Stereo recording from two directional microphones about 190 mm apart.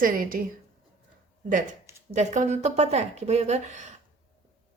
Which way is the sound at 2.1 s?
40° right (ahead or behind).